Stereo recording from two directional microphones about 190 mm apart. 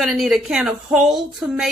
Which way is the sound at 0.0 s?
Centre (ahead or behind).